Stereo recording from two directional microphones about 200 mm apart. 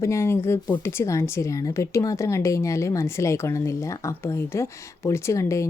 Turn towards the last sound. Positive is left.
turn(degrees=15)  # may be behind; listen again after turning